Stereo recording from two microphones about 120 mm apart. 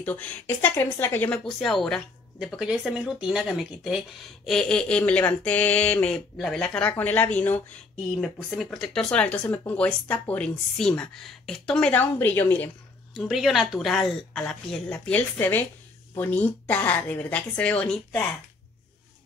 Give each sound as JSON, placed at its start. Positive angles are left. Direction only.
{"t": 0.0, "sound": "speech", "side_deg": 15}
{"t": 1.4, "sound": "speech", "side_deg": 0}
{"t": 8.2, "sound": "speech", "side_deg": 5}
{"t": 13.1, "sound": "speech", "side_deg": 0}